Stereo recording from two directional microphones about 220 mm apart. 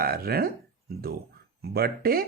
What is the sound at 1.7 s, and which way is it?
Speech, 45° right (ahead or behind).